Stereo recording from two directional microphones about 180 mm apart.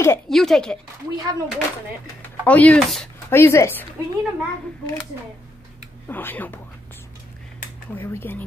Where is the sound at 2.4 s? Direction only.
10° left (ahead or behind).